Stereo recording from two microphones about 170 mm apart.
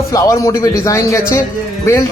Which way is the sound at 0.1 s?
20° left (ahead or behind).